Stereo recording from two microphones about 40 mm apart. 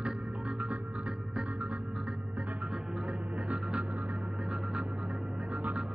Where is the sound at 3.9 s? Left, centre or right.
Right.